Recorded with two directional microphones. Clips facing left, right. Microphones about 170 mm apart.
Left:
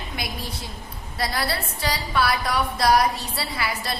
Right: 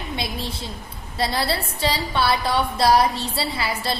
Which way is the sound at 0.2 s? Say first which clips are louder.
Right 1 dB; 25° right (ahead or behind).